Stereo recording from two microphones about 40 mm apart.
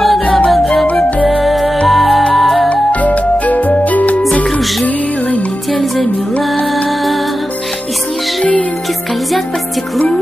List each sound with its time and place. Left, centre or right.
1.4 s music: centre
2.7 s music: left
5.7 s music: centre